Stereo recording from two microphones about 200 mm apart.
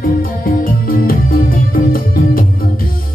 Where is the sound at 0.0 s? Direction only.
45° left (ahead or behind).